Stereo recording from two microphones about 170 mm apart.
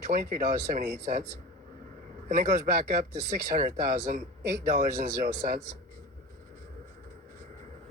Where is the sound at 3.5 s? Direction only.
50° right (ahead or behind).